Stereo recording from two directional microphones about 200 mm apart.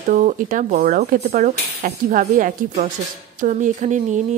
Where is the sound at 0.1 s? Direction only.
40° right (ahead or behind).